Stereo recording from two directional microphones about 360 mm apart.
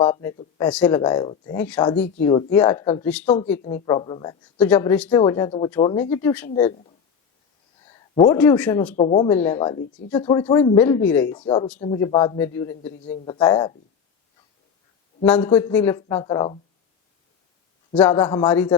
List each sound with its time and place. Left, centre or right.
0.0 s a man's voice: centre
3.6 s speech: centre
8.1 s speech: centre
9.0 s speech: centre
15.2 s speech: centre
17.9 s a man's voice: centre